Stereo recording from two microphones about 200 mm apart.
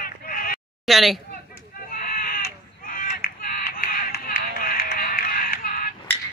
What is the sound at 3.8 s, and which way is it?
Music, 45° left (ahead or behind).